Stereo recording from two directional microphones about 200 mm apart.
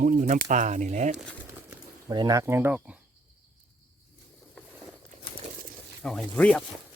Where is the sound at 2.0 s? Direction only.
20° right (ahead or behind).